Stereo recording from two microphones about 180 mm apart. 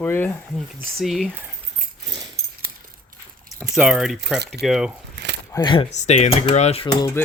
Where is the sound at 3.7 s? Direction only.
5° right (ahead or behind).